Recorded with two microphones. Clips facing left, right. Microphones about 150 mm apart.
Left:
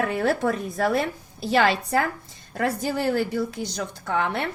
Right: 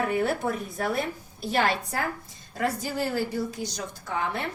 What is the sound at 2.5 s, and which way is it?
A woman's voice, 60° left (ahead or behind).